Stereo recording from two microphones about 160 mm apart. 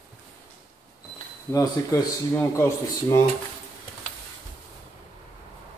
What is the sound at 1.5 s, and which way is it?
Speech, 20° left (ahead or behind).